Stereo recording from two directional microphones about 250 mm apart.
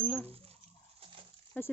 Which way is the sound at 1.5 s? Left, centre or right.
Centre.